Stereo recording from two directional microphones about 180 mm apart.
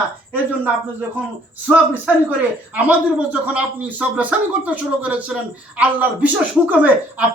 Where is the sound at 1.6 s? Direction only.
10° right (ahead or behind).